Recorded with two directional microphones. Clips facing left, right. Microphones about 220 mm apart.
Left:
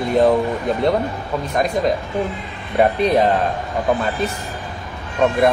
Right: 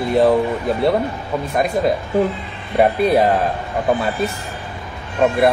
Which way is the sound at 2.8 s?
5° right (ahead or behind).